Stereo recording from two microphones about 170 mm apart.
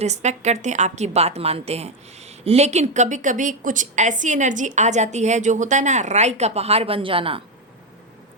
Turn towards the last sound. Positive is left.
turn(degrees=-30)  # may be behind; listen again after turning